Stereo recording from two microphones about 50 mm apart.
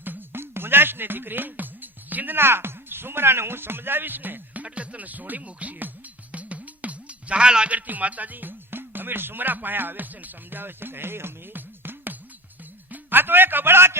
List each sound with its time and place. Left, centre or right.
0.0 s speech: right
4.6 s speech: right
12.9 s a sound: right